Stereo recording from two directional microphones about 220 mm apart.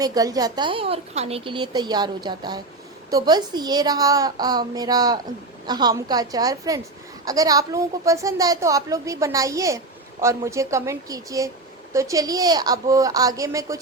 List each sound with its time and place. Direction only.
0.0 s a woman's voice: 15° right (ahead or behind)